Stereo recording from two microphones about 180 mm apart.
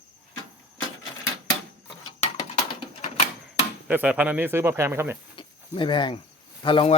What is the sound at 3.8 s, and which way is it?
Speech, 5° right (ahead or behind).